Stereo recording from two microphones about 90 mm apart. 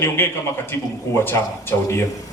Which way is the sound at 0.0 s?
25° left (ahead or behind).